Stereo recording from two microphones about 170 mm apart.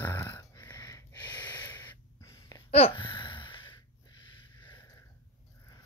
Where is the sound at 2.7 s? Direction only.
35° left (ahead or behind).